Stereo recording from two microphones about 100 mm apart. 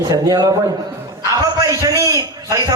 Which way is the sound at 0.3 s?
40° right (ahead or behind).